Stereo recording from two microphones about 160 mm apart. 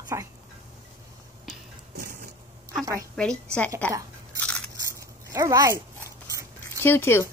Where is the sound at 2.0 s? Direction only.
60° right (ahead or behind).